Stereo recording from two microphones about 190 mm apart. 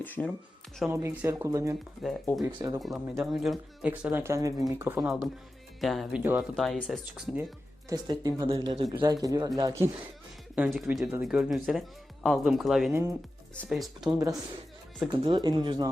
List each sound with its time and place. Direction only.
0.0 s speech: 10° left (ahead or behind)
0.9 s speech: 15° right (ahead or behind)
2.0 s speech: centre (ahead or behind)
2.4 s speech: 20° right (ahead or behind)
2.8 s speech: centre (ahead or behind); by 4.5 s 15° right (ahead or behind)
4.9 s speech: centre (ahead or behind)
7.9 s speech: 20° right (ahead or behind)
10.5 s speech: 5° right (ahead or behind)
12.9 s speech: 15° right (ahead or behind)
13.6 s speech: centre (ahead or behind)
15.2 s speech: 25° right (ahead or behind)